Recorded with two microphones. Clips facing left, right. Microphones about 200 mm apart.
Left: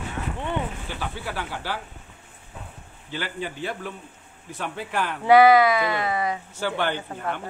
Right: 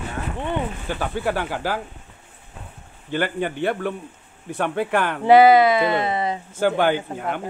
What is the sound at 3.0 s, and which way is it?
Speech, 55° right (ahead or behind).